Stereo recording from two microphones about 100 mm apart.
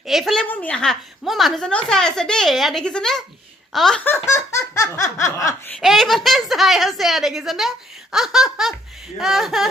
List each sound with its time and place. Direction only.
0.0 s a woman's voice: 5° right (ahead or behind)
0.5 s a woman's voice: 15° left (ahead or behind)
4.0 s laughter: 25° left (ahead or behind)
5.8 s speech: centre (ahead or behind)